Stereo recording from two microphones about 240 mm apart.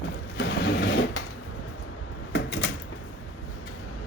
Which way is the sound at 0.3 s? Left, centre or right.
Left.